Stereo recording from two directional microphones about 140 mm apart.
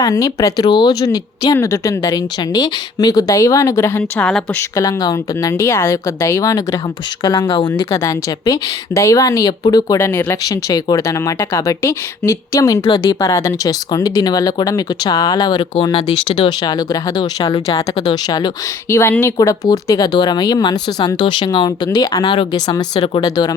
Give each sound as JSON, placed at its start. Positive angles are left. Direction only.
{"t": 0.0, "sound": "speech", "side_deg": 25}
{"t": 7.4, "sound": "speech", "side_deg": 35}
{"t": 7.9, "sound": "speech", "side_deg": 20}
{"t": 10.0, "sound": "speech", "side_deg": 15}
{"t": 10.4, "sound": "speech", "side_deg": 25}
{"t": 16.6, "sound": "speech", "side_deg": 30}